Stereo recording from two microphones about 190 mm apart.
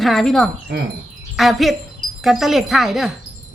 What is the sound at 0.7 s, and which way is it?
Speech, 60° right (ahead or behind).